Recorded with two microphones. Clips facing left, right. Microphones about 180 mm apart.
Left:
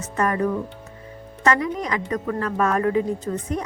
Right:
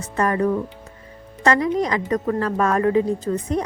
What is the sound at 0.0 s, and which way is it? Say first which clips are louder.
Speech: right 2 dB; 35° right (ahead or behind).